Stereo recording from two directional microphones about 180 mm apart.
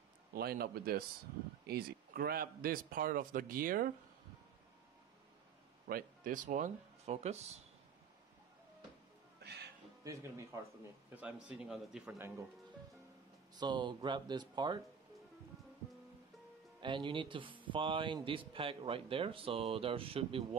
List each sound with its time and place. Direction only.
0.3 s a man's voice: 60° right (ahead or behind)
5.9 s speech: 50° right (ahead or behind)
9.4 s music: 65° right (ahead or behind)
10.0 s speech: 20° right (ahead or behind)
11.1 s a man's voice: 5° right (ahead or behind)
13.6 s speech: 25° right (ahead or behind)
16.8 s speech: 25° right (ahead or behind)